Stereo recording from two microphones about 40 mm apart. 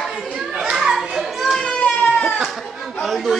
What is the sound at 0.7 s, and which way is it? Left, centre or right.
Children playing, centre.